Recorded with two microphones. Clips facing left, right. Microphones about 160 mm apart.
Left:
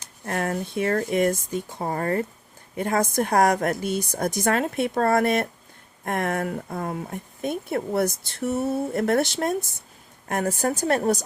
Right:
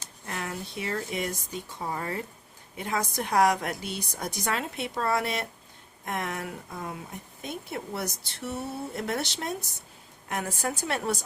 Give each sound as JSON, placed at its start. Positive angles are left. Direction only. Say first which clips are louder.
{"t": 0.3, "sound": "speech", "louder": "left 9 dB", "side_deg": 55}